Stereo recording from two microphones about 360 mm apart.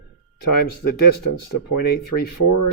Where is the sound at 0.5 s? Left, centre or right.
Left.